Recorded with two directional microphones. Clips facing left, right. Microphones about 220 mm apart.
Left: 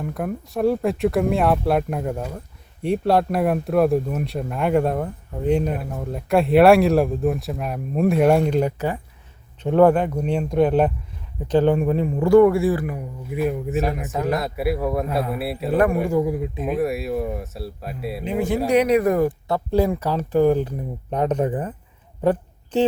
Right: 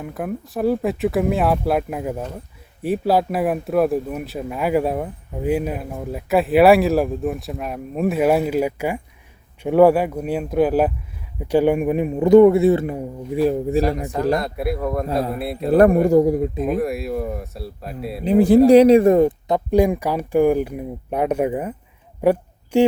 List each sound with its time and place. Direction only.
0.0 s speech: 5° right (ahead or behind); by 13.8 s 30° right (ahead or behind)
14.3 s speech: 5° left (ahead or behind)
15.7 s a man's voice: 35° right (ahead or behind)
16.6 s speech: centre (ahead or behind)
18.3 s a man's voice: 35° right (ahead or behind); by 21.8 s 10° right (ahead or behind)
22.2 s a sound: 10° right (ahead or behind)